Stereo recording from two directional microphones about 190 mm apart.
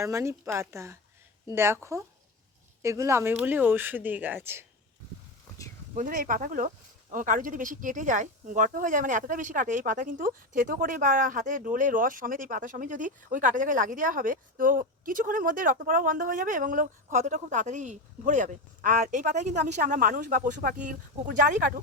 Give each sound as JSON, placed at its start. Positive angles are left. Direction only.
{"t": 0.0, "sound": "speech", "side_deg": -15}
{"t": 5.9, "sound": "speech", "side_deg": -45}